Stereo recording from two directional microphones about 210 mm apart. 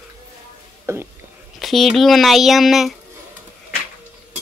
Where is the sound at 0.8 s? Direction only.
10° right (ahead or behind).